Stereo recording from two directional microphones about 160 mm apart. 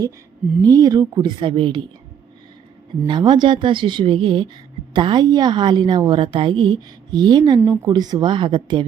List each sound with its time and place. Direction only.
0.6 s a woman's voice: 20° right (ahead or behind)
3.1 s a woman's voice: 25° right (ahead or behind)
7.6 s a woman's voice: 15° right (ahead or behind)